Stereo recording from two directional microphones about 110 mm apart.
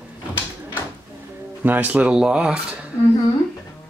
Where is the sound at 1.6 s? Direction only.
15° right (ahead or behind).